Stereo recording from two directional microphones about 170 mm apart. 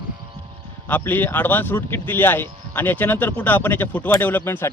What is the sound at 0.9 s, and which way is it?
Speech, 10° left (ahead or behind).